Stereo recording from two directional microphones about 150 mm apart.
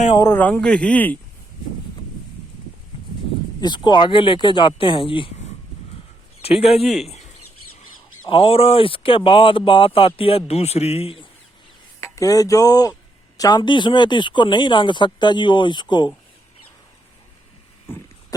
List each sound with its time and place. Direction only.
0.2 s speech: 15° left (ahead or behind)
3.6 s speech: 30° left (ahead or behind)
6.4 s a man's voice: 40° left (ahead or behind)
6.8 s speech: centre (ahead or behind)
8.3 s speech: 35° left (ahead or behind)
11.9 s speech: 20° left (ahead or behind)
17.9 s vehicle: 15° left (ahead or behind)